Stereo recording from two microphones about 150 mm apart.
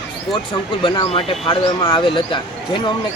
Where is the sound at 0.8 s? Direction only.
35° left (ahead or behind).